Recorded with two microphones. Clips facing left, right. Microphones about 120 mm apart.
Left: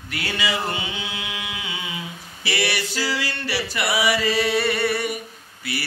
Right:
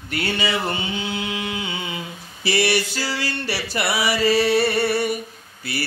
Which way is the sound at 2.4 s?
30° right (ahead or behind).